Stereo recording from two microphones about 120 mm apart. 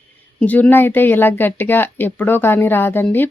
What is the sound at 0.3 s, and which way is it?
Speech, 15° left (ahead or behind).